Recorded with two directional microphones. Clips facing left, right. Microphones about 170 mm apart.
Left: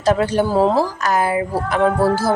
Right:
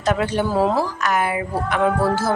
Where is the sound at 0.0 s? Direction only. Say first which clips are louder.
Left 4 dB; 35° left (ahead or behind).